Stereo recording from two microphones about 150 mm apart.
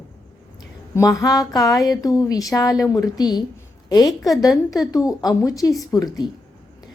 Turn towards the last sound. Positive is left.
turn(degrees=25)  # may be behind; listen again after turning